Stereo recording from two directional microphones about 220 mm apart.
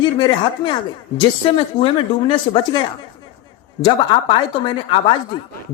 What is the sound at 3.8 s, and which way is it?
A woman's voice, 20° left (ahead or behind).